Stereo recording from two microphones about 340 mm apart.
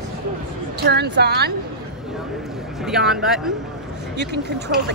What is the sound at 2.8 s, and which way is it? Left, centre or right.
Speech, centre.